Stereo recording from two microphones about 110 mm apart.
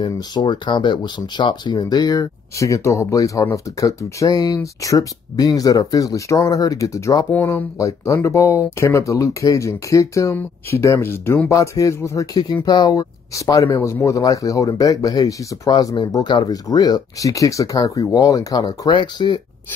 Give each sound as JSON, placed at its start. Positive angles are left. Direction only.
{"t": 0.0, "sound": "speech", "side_deg": 40}
{"t": 7.3, "sound": "speech", "side_deg": 20}